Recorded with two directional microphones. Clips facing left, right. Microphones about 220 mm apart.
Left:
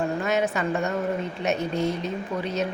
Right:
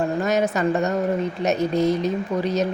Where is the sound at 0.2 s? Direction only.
40° right (ahead or behind).